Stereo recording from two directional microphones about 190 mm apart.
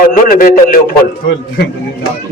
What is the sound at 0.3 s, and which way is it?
Speech, 45° left (ahead or behind).